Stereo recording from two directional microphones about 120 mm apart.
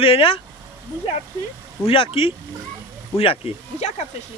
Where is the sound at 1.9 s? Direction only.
50° left (ahead or behind).